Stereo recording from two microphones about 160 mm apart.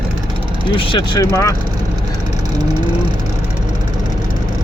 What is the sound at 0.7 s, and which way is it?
Speech, 30° left (ahead or behind).